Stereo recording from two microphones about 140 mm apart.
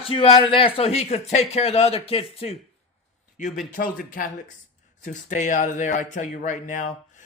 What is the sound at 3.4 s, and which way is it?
Speech, 65° left (ahead or behind).